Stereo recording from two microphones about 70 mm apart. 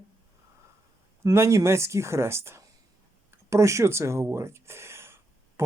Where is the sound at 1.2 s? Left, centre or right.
Right.